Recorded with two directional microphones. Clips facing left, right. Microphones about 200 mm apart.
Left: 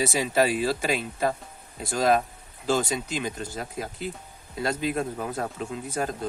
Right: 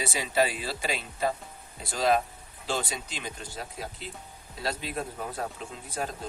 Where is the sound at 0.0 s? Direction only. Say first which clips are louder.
Left 4 dB; 45° left (ahead or behind).